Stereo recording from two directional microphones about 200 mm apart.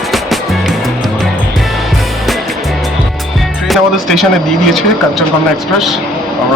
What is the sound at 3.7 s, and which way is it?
Speech, centre (ahead or behind).